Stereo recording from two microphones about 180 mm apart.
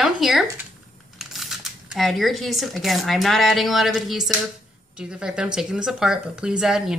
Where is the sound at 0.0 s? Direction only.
Centre (ahead or behind).